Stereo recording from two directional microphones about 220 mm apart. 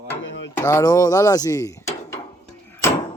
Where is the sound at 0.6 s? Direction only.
15° left (ahead or behind).